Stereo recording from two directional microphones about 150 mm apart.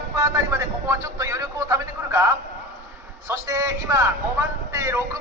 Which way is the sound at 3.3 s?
20° right (ahead or behind).